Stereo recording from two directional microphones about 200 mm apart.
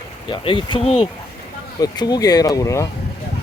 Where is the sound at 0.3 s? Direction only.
25° left (ahead or behind).